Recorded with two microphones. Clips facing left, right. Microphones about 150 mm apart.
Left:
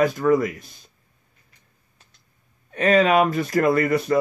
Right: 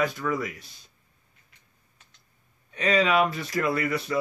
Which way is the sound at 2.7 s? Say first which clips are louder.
Left 6 dB; 50° left (ahead or behind).